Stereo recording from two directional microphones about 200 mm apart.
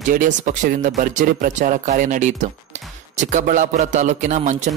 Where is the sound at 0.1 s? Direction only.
40° right (ahead or behind).